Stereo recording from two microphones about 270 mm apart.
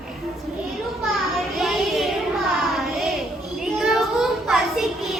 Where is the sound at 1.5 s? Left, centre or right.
Centre.